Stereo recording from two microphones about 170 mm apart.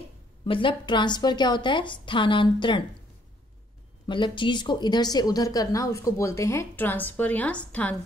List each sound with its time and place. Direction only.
0.5 s speech: 30° left (ahead or behind)
4.1 s speech: 30° left (ahead or behind); by 7.9 s 5° left (ahead or behind)